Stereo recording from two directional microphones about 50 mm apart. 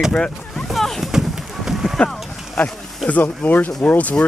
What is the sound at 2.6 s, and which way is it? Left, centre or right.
Speech, left.